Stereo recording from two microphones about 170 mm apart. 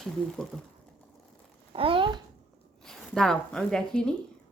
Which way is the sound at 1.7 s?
30° right (ahead or behind).